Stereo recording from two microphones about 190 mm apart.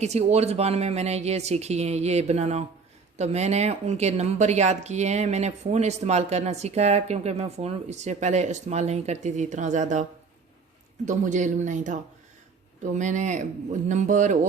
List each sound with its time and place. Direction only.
0.0 s speech: 35° right (ahead or behind)